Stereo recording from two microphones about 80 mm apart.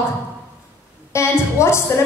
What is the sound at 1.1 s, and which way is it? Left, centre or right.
Speech, left.